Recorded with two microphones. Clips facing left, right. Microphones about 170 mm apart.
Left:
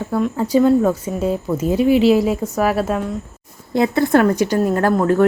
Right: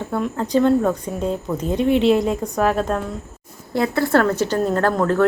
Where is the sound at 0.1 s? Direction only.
5° left (ahead or behind).